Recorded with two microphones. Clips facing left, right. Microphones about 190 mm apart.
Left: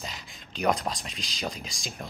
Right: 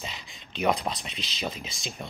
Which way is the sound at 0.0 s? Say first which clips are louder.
Even; centre (ahead or behind).